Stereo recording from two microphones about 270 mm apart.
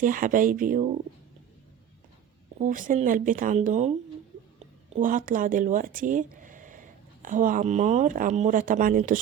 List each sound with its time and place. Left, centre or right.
0.0 s speech: right
2.6 s speech: right